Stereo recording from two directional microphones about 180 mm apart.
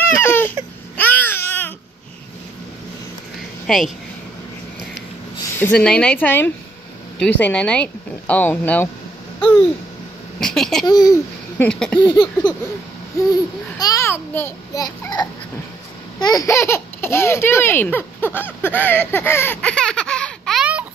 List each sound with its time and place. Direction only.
0.0 s baby cry: 10° left (ahead or behind)
0.9 s babbling: 10° left (ahead or behind)
3.6 s speech: centre (ahead or behind)
5.6 s speech: 5° left (ahead or behind)
9.4 s a sound: 5° left (ahead or behind)
10.4 s speech: centre (ahead or behind)
10.9 s a child's voice: 20° left (ahead or behind)
11.5 s speech: 5° left (ahead or behind)
12.0 s a child's voice: 25° left (ahead or behind)
13.7 s a child's voice: 20° left (ahead or behind); by 20.8 s 5° right (ahead or behind)